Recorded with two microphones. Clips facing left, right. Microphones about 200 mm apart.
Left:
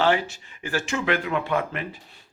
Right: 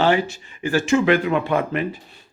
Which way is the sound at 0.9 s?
10° right (ahead or behind).